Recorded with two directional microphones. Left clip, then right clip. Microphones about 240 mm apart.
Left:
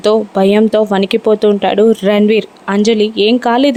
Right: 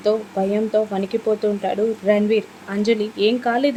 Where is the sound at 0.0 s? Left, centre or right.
Left.